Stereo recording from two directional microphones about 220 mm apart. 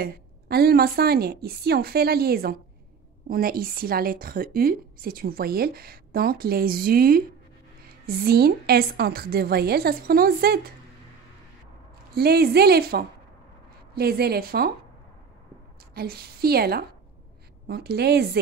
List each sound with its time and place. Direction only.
0.0 s a woman's voice: 45° right (ahead or behind)
12.1 s a woman's voice: 45° right (ahead or behind)
15.9 s a woman's voice: 45° right (ahead or behind)